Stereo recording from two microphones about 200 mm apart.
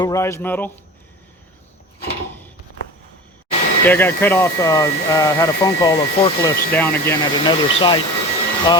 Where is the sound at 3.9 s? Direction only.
10° left (ahead or behind).